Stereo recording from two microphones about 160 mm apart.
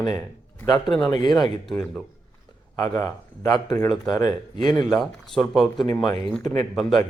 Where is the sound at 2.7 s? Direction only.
25° left (ahead or behind).